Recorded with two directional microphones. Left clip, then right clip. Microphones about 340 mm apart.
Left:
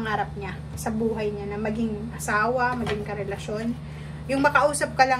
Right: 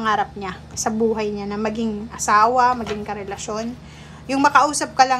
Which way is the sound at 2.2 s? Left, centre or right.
Centre.